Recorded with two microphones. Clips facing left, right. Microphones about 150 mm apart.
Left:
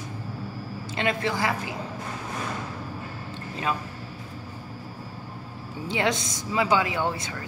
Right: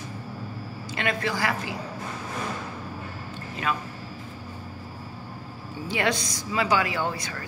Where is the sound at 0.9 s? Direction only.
25° left (ahead or behind).